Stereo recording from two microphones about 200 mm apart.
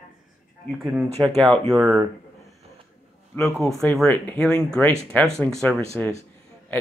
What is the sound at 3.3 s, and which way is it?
Speech, centre (ahead or behind).